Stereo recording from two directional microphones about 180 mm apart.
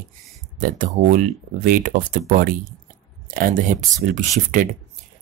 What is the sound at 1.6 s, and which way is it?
Speech, 50° right (ahead or behind).